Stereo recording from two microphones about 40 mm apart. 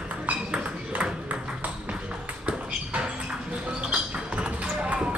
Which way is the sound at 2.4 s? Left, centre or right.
Right.